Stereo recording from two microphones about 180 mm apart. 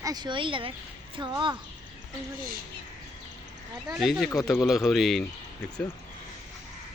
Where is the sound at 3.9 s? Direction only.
Centre (ahead or behind).